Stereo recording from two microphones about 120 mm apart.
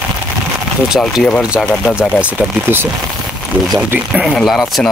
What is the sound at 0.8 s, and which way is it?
Speech, 5° right (ahead or behind).